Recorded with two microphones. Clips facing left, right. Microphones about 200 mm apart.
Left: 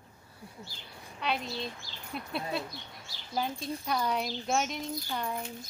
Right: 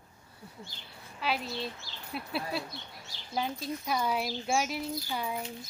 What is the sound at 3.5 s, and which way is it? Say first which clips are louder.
Speech: even; 30° left (ahead or behind).